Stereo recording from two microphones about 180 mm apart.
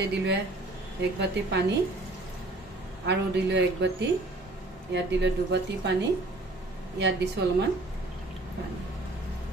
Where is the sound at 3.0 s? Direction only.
75° right (ahead or behind).